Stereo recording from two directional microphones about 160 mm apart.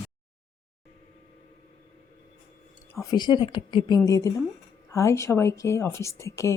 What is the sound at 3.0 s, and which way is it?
Speech, 25° left (ahead or behind).